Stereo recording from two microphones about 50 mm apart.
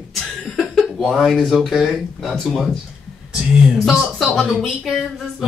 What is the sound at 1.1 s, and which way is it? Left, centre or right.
Speech, centre.